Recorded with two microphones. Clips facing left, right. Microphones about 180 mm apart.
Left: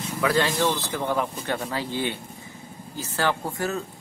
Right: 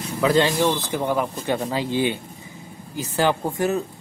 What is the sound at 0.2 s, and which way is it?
Speech, 25° right (ahead or behind).